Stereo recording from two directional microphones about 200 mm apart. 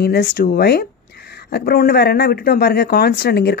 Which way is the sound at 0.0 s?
50° left (ahead or behind).